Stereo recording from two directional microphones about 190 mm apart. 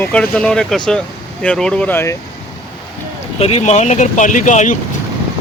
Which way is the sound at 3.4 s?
35° left (ahead or behind).